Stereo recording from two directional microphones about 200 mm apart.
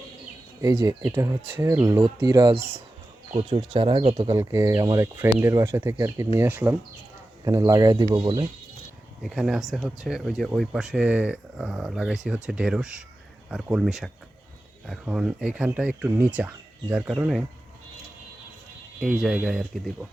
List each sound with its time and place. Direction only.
0.6 s speech: 15° right (ahead or behind)
9.2 s speech: centre (ahead or behind)
18.9 s speech: centre (ahead or behind)